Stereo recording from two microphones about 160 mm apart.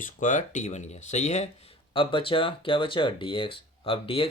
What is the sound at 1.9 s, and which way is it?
Speech, 30° left (ahead or behind).